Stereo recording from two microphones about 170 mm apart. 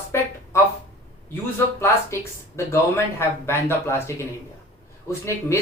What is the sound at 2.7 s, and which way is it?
Speech, 15° left (ahead or behind).